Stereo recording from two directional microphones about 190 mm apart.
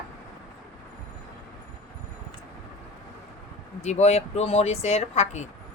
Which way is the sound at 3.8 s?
35° left (ahead or behind).